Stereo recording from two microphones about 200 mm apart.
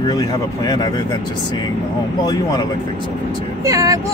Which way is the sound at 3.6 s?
15° right (ahead or behind).